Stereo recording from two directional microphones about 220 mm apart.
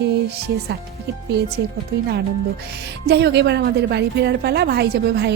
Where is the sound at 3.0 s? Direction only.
50° right (ahead or behind).